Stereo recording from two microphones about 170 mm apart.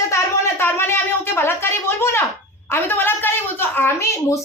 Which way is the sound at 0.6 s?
15° left (ahead or behind).